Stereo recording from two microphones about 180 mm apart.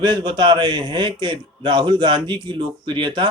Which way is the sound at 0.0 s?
25° right (ahead or behind).